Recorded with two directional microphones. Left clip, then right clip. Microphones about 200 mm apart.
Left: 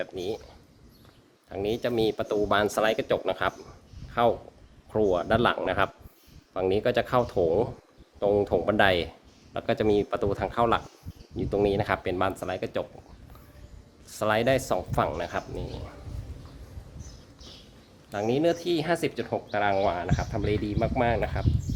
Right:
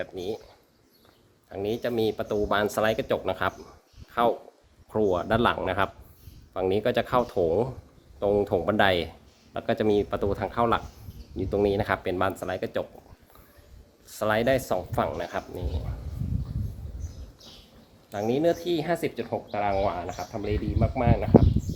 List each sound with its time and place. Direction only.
0.0 s speech: 15° left (ahead or behind)
1.5 s speech: 15° left (ahead or behind); by 12.9 s centre (ahead or behind)
14.1 s speech: 5° left (ahead or behind)
18.1 s speech: 10° left (ahead or behind); by 21.2 s 30° left (ahead or behind)